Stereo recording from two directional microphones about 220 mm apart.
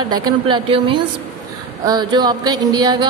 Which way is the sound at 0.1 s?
20° right (ahead or behind).